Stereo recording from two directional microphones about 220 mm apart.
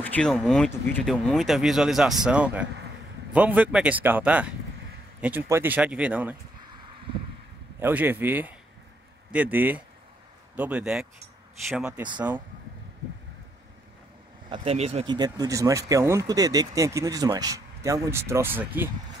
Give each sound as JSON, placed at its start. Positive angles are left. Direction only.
{"t": 0.0, "sound": "speech", "side_deg": 5}
{"t": 7.8, "sound": "speech", "side_deg": -10}
{"t": 14.5, "sound": "speech", "side_deg": -25}